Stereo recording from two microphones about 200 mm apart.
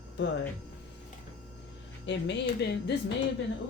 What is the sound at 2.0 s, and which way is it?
Speech, 65° left (ahead or behind).